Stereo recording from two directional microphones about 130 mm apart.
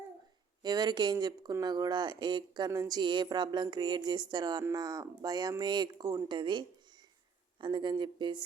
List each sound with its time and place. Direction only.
0.6 s a woman's voice: 30° right (ahead or behind)